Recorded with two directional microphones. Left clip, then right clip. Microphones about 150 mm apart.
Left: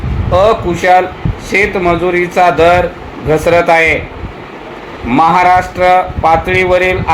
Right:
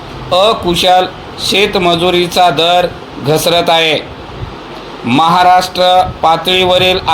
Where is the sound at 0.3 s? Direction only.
40° right (ahead or behind).